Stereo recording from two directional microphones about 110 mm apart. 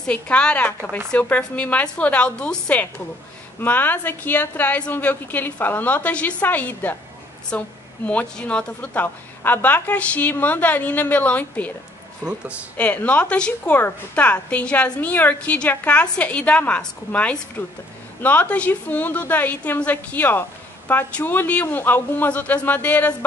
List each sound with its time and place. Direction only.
0.0 s a woman's voice: 10° left (ahead or behind)
12.7 s a woman's voice: 15° left (ahead or behind)